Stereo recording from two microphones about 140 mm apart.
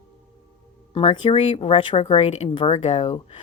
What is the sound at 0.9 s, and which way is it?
Speech, 40° left (ahead or behind).